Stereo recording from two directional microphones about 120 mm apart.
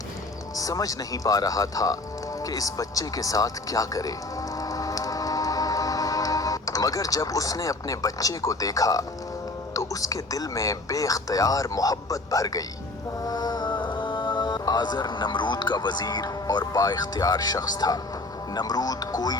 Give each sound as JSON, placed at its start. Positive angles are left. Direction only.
{"t": 0.5, "sound": "speech", "side_deg": 30}
{"t": 2.4, "sound": "music", "side_deg": 30}
{"t": 9.7, "sound": "speech", "side_deg": 30}